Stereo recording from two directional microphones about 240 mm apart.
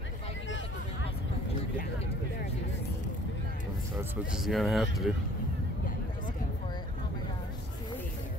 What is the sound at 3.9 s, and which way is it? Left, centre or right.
Speech, centre.